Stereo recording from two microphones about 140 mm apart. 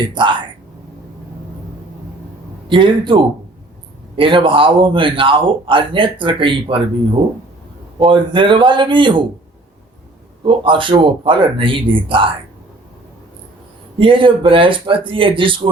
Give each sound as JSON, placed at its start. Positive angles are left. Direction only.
{"t": 0.0, "sound": "speech", "side_deg": -35}
{"t": 2.6, "sound": "speech", "side_deg": -35}
{"t": 10.4, "sound": "speech", "side_deg": -35}
{"t": 14.0, "sound": "speech", "side_deg": -35}